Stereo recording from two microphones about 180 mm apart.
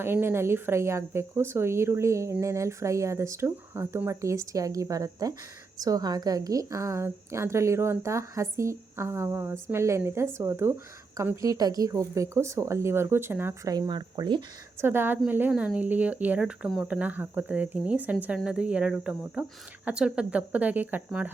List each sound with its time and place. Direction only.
0.0 s speech: 10° right (ahead or behind)
14.8 s speech: 10° right (ahead or behind)